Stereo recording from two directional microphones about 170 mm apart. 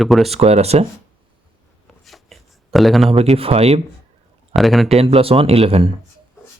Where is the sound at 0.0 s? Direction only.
Centre (ahead or behind).